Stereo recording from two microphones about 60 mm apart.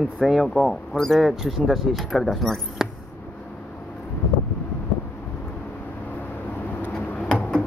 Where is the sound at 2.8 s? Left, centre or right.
Centre.